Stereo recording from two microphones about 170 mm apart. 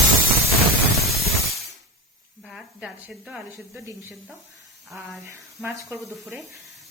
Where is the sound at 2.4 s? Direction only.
5° right (ahead or behind).